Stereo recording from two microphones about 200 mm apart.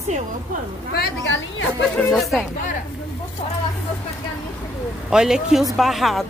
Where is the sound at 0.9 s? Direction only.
60° left (ahead or behind).